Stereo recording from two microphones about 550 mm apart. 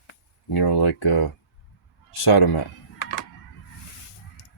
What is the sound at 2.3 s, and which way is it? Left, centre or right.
Speech, left.